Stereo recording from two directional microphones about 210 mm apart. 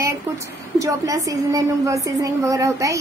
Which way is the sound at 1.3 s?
15° right (ahead or behind).